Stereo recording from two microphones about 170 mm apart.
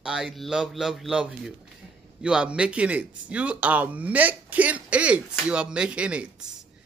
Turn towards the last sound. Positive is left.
turn(degrees=-5)  # may be behind; listen again after turning